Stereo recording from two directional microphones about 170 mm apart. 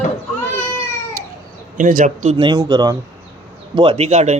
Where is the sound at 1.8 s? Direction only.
50° right (ahead or behind).